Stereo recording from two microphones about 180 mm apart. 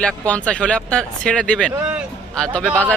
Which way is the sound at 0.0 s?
5° left (ahead or behind).